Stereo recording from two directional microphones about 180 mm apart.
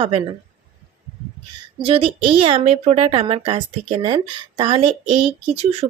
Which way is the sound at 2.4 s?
30° right (ahead or behind).